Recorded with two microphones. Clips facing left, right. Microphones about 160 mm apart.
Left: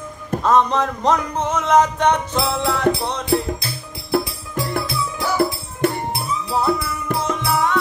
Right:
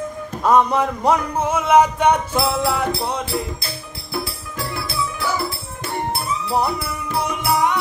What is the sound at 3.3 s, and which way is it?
Music, 55° left (ahead or behind).